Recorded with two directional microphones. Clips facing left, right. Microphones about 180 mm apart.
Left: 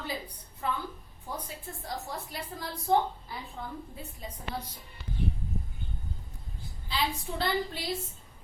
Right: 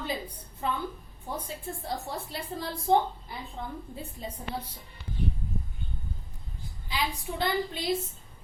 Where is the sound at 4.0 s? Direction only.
25° right (ahead or behind).